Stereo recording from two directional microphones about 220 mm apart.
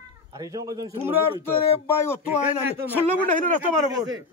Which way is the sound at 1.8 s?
10° left (ahead or behind).